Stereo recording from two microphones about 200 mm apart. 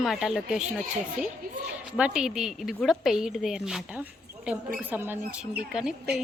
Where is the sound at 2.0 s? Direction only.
5° right (ahead or behind).